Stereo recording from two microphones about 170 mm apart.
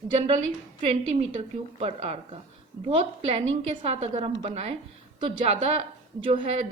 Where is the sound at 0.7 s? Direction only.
40° right (ahead or behind).